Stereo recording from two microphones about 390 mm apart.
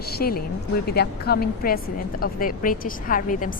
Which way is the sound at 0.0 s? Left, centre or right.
Left.